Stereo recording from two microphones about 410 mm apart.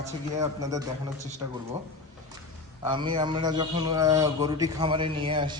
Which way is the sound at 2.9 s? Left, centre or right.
Centre.